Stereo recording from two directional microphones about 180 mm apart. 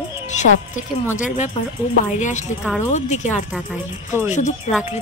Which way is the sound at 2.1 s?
40° left (ahead or behind).